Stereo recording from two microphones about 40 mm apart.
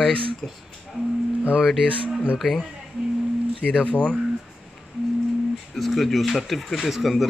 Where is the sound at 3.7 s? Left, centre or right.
Left.